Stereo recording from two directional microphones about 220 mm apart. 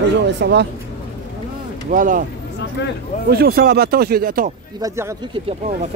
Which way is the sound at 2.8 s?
50° left (ahead or behind).